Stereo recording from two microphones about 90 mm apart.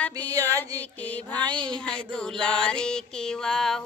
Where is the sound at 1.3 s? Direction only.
55° right (ahead or behind).